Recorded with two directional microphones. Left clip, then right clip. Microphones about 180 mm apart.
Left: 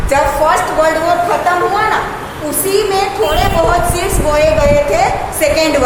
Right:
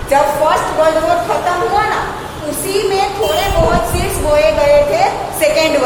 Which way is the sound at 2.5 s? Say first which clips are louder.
Left 2 dB; 25° left (ahead or behind).